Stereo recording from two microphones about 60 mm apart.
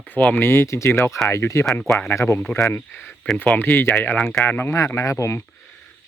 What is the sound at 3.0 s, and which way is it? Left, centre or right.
Speech, centre.